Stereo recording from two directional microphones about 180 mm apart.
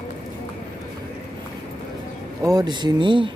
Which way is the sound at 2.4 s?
20° right (ahead or behind).